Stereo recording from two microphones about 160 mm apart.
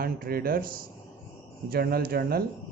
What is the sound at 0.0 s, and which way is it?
Speech, 65° right (ahead or behind).